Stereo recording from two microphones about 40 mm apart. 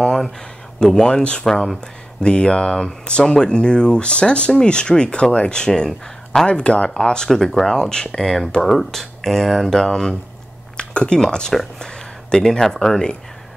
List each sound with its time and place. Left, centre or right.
0.0 s a sound: centre
1.0 s speech: left
1.4 s speech: centre
2.2 s speech: left
7.2 s speech: centre
10.8 s speech: left
11.8 s a sound: centre
12.4 s speech: centre